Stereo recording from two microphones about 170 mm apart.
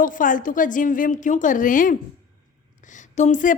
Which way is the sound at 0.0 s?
50° left (ahead or behind).